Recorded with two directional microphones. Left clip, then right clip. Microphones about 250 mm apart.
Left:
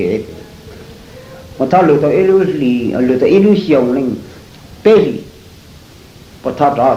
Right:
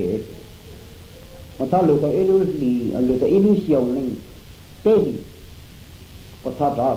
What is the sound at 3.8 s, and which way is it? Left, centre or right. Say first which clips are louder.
Speech: left 8 dB; right.